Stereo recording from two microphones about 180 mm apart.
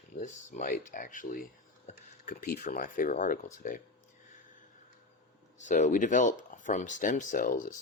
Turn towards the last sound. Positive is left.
turn(degrees=50)  # may be behind; listen again after turning